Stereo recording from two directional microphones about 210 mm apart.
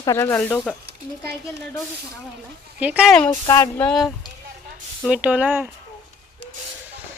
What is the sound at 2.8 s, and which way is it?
Speech, 5° right (ahead or behind).